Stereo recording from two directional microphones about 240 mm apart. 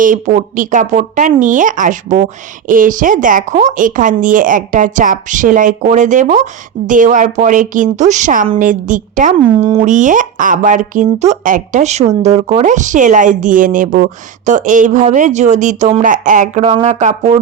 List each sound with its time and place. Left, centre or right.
0.0 s speech: right